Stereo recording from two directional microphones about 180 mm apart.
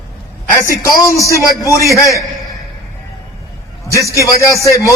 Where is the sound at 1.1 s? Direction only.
15° left (ahead or behind).